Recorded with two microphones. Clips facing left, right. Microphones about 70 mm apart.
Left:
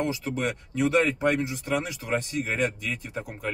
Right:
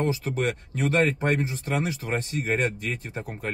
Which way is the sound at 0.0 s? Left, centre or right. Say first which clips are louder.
Right 2 dB; right.